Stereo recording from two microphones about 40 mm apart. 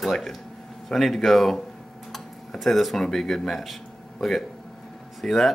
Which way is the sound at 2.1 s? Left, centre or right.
Centre.